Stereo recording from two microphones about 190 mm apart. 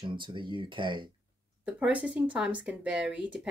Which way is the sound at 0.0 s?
25° right (ahead or behind).